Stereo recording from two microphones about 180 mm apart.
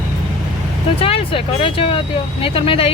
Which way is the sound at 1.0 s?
30° left (ahead or behind).